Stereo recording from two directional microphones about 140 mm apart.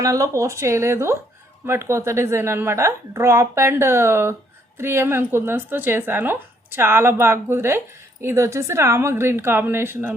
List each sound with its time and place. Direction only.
0.0 s a woman's voice: 20° right (ahead or behind)